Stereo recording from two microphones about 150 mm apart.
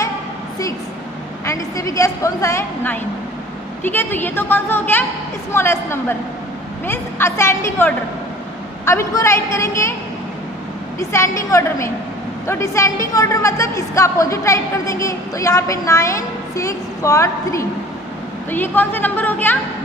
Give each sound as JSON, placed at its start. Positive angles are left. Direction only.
{"t": 1.4, "sound": "a woman's voice", "side_deg": 20}
{"t": 11.0, "sound": "a woman's voice", "side_deg": 20}